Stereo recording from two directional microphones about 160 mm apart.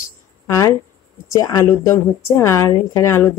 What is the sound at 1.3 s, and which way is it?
A woman's voice, 20° left (ahead or behind).